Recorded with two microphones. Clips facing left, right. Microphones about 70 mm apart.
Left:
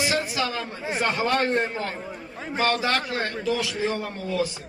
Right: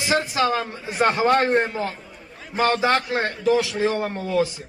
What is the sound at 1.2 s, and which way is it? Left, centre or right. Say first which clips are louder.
Speech: right 5 dB; right.